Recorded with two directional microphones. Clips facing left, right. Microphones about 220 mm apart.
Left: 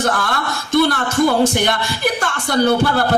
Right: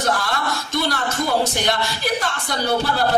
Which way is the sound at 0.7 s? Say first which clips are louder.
Left 10 dB; 55° left (ahead or behind).